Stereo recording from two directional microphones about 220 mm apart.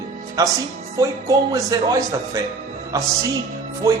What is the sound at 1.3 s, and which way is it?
Speech, 15° right (ahead or behind).